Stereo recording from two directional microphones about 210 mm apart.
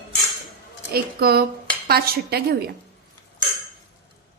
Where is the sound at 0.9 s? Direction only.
45° right (ahead or behind).